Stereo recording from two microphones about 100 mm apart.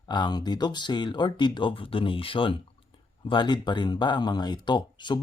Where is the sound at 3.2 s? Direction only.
50° left (ahead or behind).